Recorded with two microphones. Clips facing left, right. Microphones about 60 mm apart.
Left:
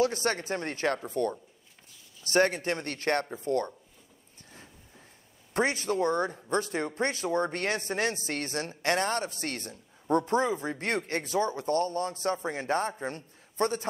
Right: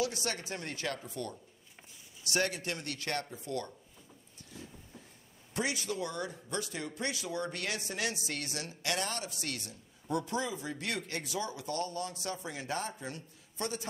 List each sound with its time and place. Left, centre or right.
0.0 s speech: left
4.6 s a sound: left
5.5 s speech: left